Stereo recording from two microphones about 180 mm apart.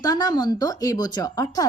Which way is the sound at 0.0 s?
20° left (ahead or behind).